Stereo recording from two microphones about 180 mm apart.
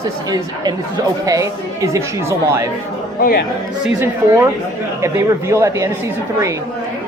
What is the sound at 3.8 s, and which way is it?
A woman's voice, 15° right (ahead or behind).